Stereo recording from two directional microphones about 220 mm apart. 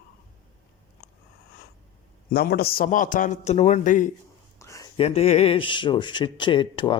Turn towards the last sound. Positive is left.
turn(degrees=20)  # may be behind; listen again after turning